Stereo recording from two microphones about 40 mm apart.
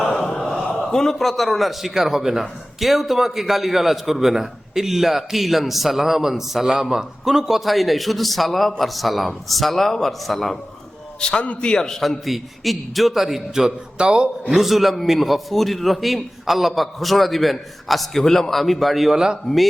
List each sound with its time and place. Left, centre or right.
0.9 s a man's voice: centre
11.2 s a man's voice: left
11.8 s a man's voice: centre
12.2 s a man's voice: centre
13.5 s a man's voice: centre
14.5 s a man's voice: centre
19.1 s a man's voice: centre